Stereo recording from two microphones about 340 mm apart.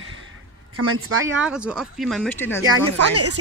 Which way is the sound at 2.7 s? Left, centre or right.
Right.